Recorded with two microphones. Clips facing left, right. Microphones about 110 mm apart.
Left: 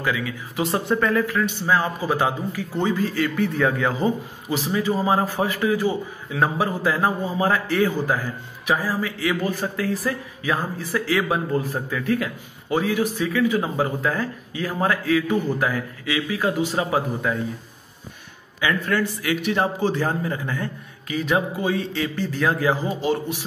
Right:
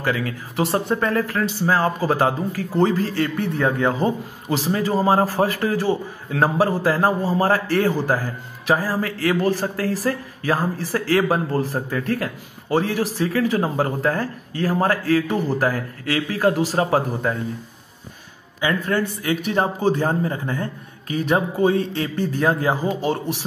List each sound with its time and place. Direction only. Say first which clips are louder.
0.0 s speech: right 2 dB; 45° right (ahead or behind)
0.9 s speech: even; 30° right (ahead or behind)
3.5 s speech: right 2 dB; 30° right (ahead or behind)
18.6 s speech: right 1 dB; 35° right (ahead or behind)
20.0 s speech: right 2 dB; 30° right (ahead or behind)
21.6 s speech: right 4 dB; 50° right (ahead or behind)
22.5 s speech: left 1 dB; 40° right (ahead or behind)